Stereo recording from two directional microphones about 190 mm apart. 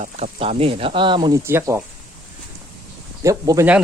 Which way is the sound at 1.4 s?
15° right (ahead or behind).